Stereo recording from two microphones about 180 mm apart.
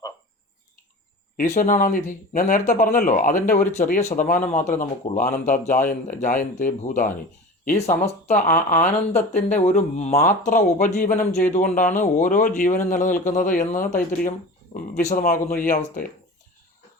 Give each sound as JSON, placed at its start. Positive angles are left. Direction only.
{"t": 1.5, "sound": "speech", "side_deg": 45}